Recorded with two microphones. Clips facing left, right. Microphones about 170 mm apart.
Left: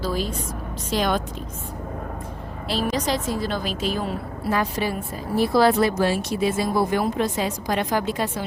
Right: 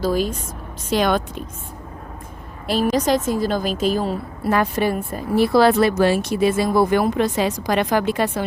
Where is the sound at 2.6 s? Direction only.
50° right (ahead or behind).